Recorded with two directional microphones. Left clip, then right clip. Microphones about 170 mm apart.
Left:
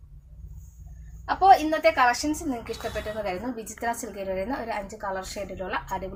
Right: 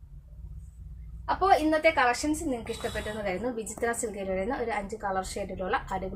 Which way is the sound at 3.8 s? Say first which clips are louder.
Left 1 dB; 20° right (ahead or behind).